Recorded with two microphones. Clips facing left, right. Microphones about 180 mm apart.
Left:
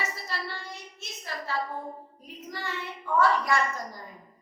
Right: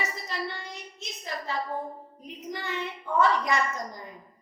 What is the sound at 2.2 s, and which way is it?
A woman's voice, 20° right (ahead or behind).